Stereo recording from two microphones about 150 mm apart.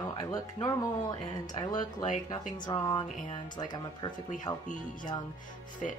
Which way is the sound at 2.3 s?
30° left (ahead or behind).